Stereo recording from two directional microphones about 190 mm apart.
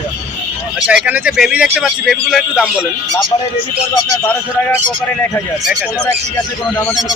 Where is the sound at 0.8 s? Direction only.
5° right (ahead or behind).